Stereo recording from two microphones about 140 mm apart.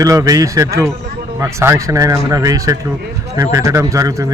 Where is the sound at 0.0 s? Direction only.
25° right (ahead or behind).